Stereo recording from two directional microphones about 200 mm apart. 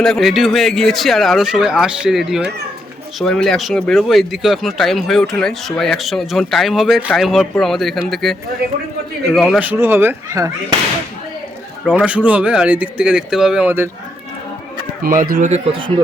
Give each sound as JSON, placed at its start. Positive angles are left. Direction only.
{"t": 0.0, "sound": "speech", "side_deg": 0}
{"t": 11.9, "sound": "speech", "side_deg": -5}
{"t": 15.0, "sound": "speech", "side_deg": -45}